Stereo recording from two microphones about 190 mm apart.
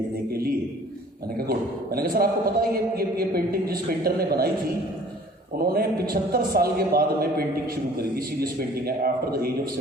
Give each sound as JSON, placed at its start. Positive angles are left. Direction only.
{"t": 0.3, "sound": "a sound", "side_deg": -50}
{"t": 1.4, "sound": "a man's voice", "side_deg": -55}
{"t": 5.5, "sound": "a man's voice", "side_deg": -50}